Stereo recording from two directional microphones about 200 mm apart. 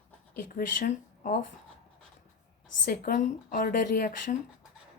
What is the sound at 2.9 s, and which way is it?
Speech, 45° left (ahead or behind).